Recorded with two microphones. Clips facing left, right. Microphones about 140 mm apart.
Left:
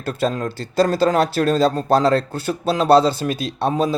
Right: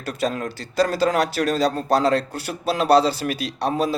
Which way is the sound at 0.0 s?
30° left (ahead or behind).